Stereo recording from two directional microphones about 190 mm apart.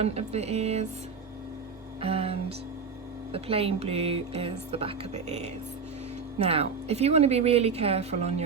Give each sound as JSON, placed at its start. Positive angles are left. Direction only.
{"t": 0.0, "sound": "speech", "side_deg": -35}
{"t": 2.0, "sound": "speech", "side_deg": -30}